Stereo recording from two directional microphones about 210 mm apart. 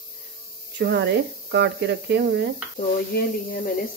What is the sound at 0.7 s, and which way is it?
Speech, 55° right (ahead or behind).